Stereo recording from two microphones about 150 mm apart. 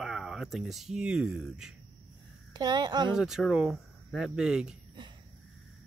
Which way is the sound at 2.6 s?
30° right (ahead or behind).